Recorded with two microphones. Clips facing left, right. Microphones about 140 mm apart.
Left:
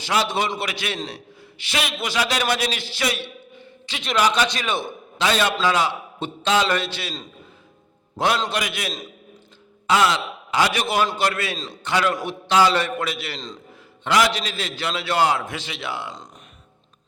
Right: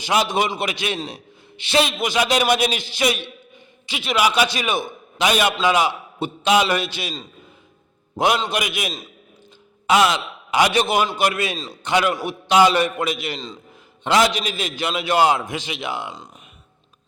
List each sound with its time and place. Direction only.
0.0 s a man's voice: 15° right (ahead or behind)
8.1 s a man's voice: 15° right (ahead or behind)
11.5 s a man's voice: 5° right (ahead or behind)
11.8 s a man's voice: 15° right (ahead or behind)